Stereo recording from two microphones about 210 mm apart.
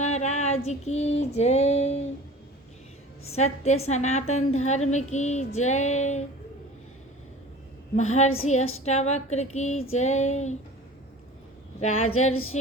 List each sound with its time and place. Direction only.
0.0 s female singing: 35° left (ahead or behind)
3.3 s female singing: 30° left (ahead or behind)
7.9 s female singing: 35° left (ahead or behind)
12.0 s a sound: 85° left